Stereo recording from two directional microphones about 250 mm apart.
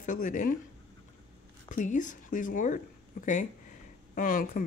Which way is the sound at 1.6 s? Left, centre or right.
Left.